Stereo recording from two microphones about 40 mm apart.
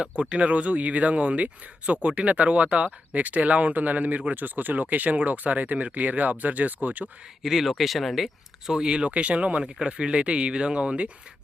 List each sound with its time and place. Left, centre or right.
0.0 s speech: right
7.4 s speech: centre
8.7 s speech: right